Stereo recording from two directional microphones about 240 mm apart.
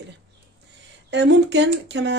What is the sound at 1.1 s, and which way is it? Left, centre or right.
Speech, right.